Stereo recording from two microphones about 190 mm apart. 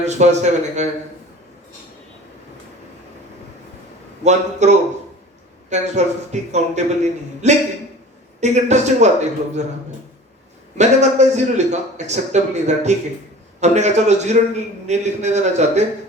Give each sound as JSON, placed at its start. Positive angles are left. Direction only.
{"t": 0.0, "sound": "a man's voice", "side_deg": -35}
{"t": 4.2, "sound": "a man's voice", "side_deg": -35}
{"t": 10.8, "sound": "a man's voice", "side_deg": -35}